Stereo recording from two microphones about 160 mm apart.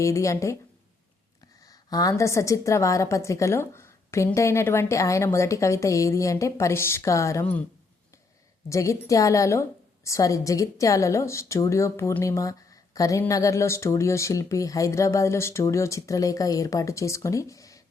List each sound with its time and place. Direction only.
0.0 s a woman's voice: 20° left (ahead or behind)
1.6 s a woman's voice: 25° left (ahead or behind)
8.7 s a woman's voice: 20° left (ahead or behind)